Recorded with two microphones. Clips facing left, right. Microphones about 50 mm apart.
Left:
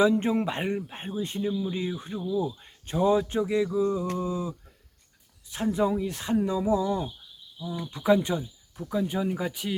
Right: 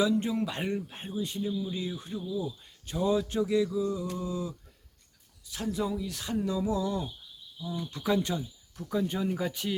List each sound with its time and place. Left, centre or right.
0.0 s speech: left
8.9 s speech: centre